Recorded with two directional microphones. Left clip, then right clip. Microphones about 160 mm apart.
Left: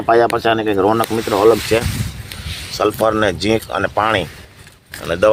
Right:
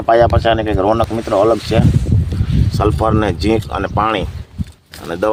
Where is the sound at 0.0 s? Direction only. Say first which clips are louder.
Right 2 dB; 30° right (ahead or behind).